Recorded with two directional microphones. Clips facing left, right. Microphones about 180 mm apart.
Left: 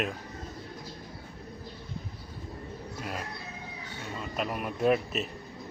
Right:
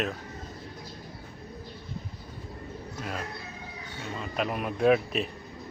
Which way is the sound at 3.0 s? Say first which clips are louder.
Right 2 dB; 5° left (ahead or behind).